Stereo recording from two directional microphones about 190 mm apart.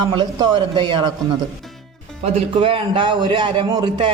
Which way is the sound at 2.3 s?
30° right (ahead or behind).